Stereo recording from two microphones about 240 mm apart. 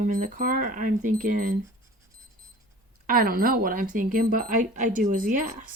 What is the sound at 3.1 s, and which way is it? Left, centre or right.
Speech, right.